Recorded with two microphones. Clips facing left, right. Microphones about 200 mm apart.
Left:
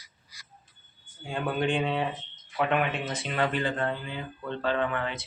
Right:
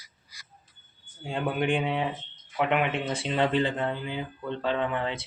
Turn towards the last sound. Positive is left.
turn(degrees=-25)  # may be behind; listen again after turning